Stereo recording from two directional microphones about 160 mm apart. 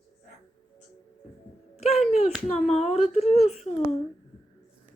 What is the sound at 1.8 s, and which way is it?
Speech, 40° left (ahead or behind).